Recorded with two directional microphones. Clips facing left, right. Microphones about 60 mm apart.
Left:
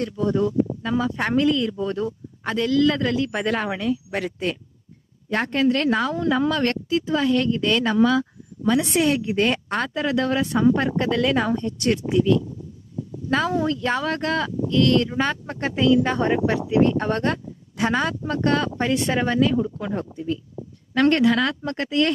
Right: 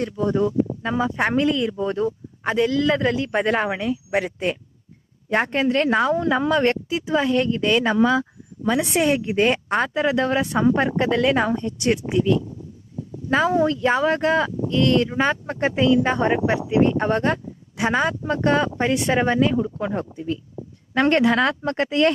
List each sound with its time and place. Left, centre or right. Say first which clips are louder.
0.0 s speech: right 1 dB; right